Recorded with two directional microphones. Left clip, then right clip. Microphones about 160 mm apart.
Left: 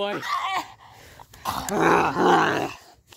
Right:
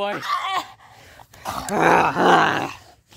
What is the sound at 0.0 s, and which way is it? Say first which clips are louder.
Speech: right 2 dB; 20° right (ahead or behind).